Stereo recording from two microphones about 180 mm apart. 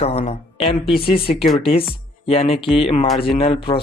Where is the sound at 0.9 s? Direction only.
60° left (ahead or behind).